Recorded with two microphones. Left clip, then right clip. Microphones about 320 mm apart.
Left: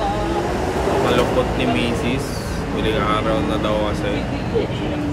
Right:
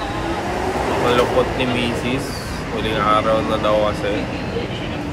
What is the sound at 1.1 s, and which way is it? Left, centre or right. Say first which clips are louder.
Speech: right 2 dB; centre.